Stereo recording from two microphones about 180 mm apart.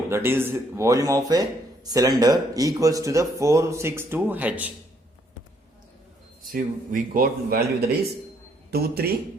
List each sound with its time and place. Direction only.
0.1 s speech: 10° right (ahead or behind)
6.4 s a man's voice: 50° right (ahead or behind)
8.7 s a man's voice: 60° right (ahead or behind)